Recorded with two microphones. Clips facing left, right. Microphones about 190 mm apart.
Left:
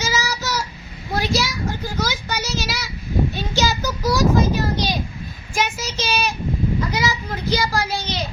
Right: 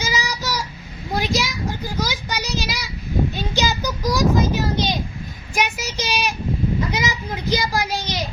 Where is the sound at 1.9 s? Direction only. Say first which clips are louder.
Left 1 dB; 15° right (ahead or behind).